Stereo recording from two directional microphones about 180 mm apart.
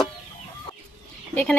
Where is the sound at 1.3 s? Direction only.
10° left (ahead or behind).